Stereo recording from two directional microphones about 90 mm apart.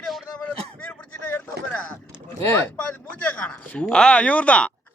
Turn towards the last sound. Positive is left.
turn(degrees=15)  # may be behind; listen again after turning